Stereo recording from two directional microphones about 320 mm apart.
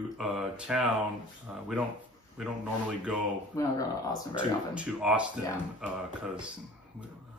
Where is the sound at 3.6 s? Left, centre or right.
Centre.